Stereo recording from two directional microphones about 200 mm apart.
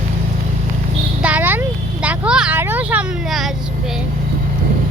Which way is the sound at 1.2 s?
10° right (ahead or behind).